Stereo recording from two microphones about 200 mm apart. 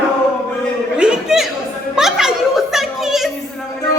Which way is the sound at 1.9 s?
Centre (ahead or behind).